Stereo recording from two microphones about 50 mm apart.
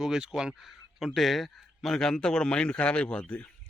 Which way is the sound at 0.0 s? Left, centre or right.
Centre.